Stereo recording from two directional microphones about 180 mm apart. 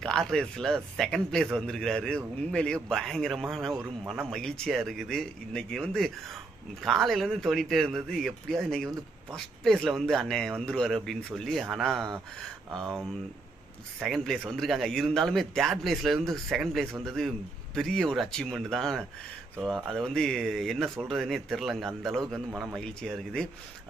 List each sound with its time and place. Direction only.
0.0 s a man's voice: 5° left (ahead or behind)
14.0 s a man's voice: centre (ahead or behind)